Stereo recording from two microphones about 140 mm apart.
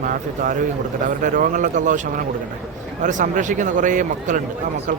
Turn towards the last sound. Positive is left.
turn(degrees=-65)  # may be behind; listen again after turning